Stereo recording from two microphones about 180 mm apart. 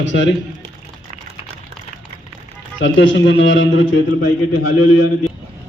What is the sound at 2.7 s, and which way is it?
A man's voice, 90° left.